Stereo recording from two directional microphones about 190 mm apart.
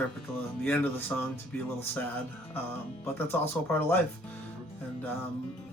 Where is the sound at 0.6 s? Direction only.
10° left (ahead or behind).